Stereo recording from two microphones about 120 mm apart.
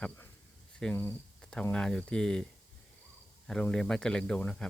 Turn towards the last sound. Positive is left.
turn(degrees=10)  # may be behind; listen again after turning